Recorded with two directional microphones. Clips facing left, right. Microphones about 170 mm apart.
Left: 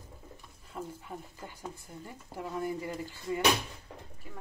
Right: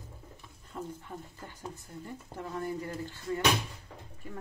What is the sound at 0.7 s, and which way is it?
Speech, 10° left (ahead or behind).